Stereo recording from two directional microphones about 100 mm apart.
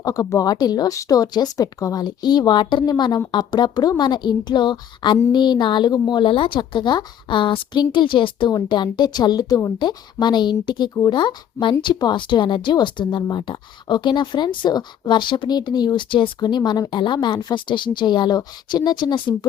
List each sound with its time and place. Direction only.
0.0 s speech: 35° left (ahead or behind)